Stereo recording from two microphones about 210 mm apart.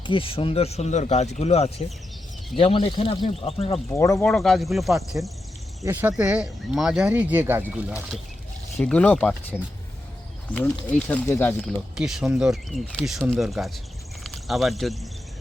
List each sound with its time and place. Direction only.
0.1 s speech: 25° left (ahead or behind)
3.9 s speech: 15° left (ahead or behind)
4.3 s speech: centre (ahead or behind)
8.8 s speech: 5° left (ahead or behind)